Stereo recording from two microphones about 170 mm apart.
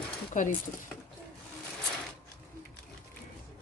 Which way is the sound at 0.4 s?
45° left (ahead or behind).